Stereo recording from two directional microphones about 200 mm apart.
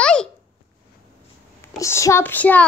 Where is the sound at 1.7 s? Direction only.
15° left (ahead or behind).